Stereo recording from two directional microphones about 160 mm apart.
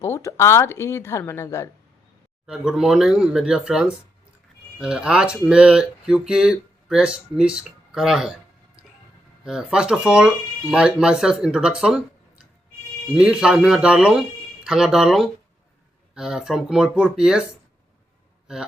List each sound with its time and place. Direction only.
0.0 s a woman's voice: 15° left (ahead or behind)
2.5 s speech: 5° right (ahead or behind)